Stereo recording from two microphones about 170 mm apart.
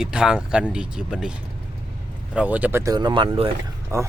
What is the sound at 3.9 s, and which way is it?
Speech, 15° right (ahead or behind).